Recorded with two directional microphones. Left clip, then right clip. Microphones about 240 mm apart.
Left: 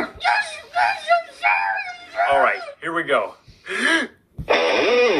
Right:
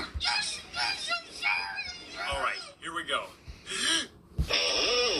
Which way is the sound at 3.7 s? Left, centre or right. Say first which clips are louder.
Left 10 dB; left.